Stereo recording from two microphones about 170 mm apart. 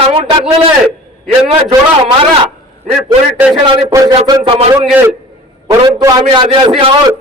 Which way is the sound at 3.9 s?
20° right (ahead or behind).